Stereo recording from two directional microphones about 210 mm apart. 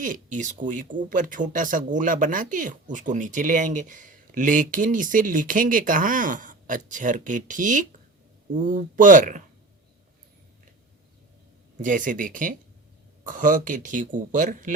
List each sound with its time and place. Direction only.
0.0 s speech: 40° right (ahead or behind)
11.8 s speech: 40° right (ahead or behind)